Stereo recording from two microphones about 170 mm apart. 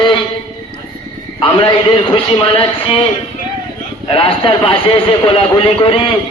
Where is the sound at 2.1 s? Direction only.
30° left (ahead or behind).